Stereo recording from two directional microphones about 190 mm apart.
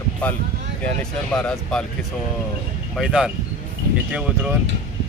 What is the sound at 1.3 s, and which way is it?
Speech, 5° left (ahead or behind).